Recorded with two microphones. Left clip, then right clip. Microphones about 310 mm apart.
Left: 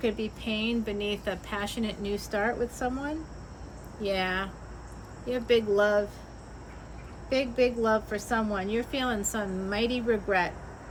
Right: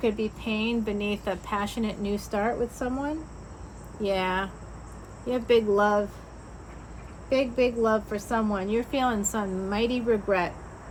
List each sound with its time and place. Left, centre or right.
0.0 s a woman's voice: centre
7.3 s a woman's voice: centre